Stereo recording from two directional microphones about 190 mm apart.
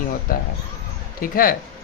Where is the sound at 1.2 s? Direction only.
50° left (ahead or behind).